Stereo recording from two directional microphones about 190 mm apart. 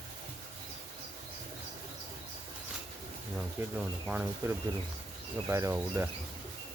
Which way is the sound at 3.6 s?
10° right (ahead or behind).